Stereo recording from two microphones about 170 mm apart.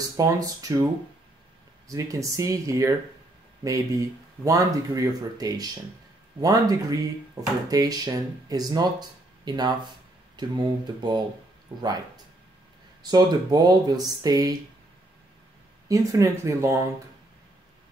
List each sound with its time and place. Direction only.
0.2 s speech: 20° right (ahead or behind)
1.9 s speech: 20° right (ahead or behind)
13.0 s speech: 25° right (ahead or behind)
15.9 s speech: 20° right (ahead or behind)